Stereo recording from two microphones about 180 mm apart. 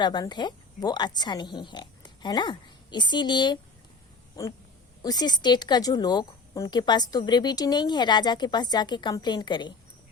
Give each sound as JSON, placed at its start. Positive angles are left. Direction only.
{"t": 0.0, "sound": "speech", "side_deg": 25}
{"t": 5.0, "sound": "speech", "side_deg": 20}